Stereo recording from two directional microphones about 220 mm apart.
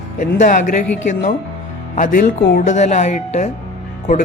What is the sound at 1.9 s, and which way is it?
Speech, 40° left (ahead or behind).